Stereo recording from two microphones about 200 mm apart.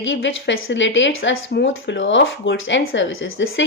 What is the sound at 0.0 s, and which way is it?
A woman's voice, 70° left (ahead or behind).